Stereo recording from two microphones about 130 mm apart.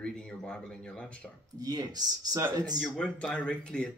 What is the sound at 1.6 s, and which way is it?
Speech, 30° right (ahead or behind).